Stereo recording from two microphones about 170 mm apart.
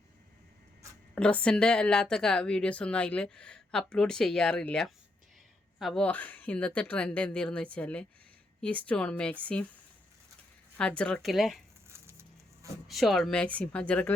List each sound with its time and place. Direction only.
1.1 s speech: 5° left (ahead or behind)
10.8 s speech: 5° left (ahead or behind)
11.9 s a sound: 15° right (ahead or behind)
12.9 s speech: centre (ahead or behind)